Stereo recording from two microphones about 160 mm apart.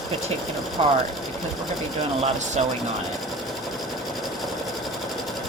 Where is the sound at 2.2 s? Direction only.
45° right (ahead or behind).